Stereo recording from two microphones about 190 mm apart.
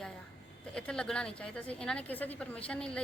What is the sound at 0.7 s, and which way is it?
A woman's voice, 5° left (ahead or behind).